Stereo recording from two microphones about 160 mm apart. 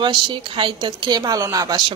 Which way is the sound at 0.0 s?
30° right (ahead or behind).